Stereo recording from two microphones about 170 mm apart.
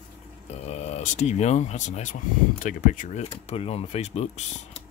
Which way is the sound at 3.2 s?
35° left (ahead or behind).